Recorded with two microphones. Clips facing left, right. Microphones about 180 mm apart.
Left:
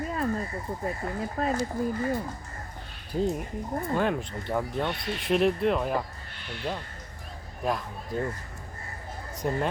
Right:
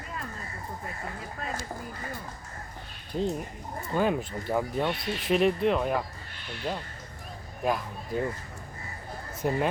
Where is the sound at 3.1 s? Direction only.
5° left (ahead or behind).